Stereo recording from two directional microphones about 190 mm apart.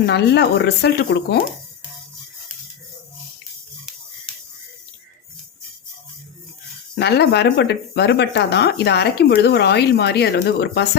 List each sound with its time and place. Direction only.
0.0 s speech: 60° left (ahead or behind)
7.0 s speech: 60° left (ahead or behind)